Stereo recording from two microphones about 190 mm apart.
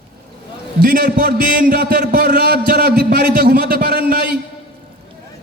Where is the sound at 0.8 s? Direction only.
50° right (ahead or behind).